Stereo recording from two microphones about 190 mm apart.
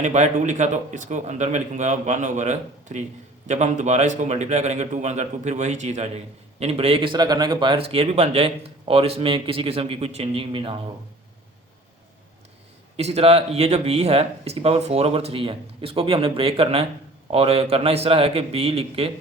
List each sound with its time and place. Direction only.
0.0 s speech: 40° right (ahead or behind)
13.0 s speech: 35° right (ahead or behind)